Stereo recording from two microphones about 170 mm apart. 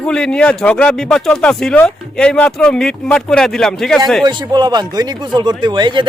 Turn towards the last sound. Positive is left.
turn(degrees=-25)  # may be behind; listen again after turning